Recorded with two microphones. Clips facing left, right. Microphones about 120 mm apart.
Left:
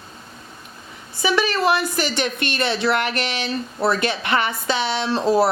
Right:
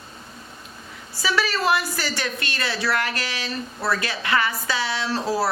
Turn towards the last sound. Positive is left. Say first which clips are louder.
# left 6 dB
turn(degrees=20)  # may be behind; listen again after turning